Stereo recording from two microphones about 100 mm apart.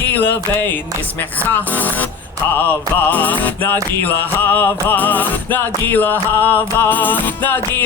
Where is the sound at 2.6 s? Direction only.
20° left (ahead or behind).